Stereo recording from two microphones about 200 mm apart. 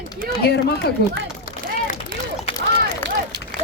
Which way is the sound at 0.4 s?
55° left (ahead or behind).